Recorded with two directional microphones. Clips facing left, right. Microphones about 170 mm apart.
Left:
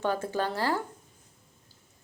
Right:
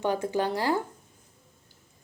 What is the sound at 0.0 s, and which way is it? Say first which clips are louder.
Speech: right 2 dB; 15° right (ahead or behind).